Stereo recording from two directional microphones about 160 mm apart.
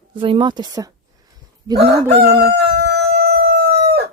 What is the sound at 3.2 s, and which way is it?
Crowing, 90° right.